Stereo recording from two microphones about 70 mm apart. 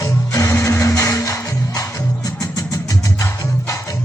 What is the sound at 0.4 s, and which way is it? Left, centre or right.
Music, left.